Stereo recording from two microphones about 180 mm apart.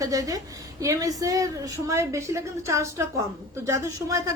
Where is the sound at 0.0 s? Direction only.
20° right (ahead or behind).